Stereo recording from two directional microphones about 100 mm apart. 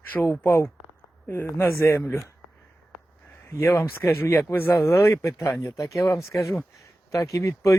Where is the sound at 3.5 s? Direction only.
25° left (ahead or behind).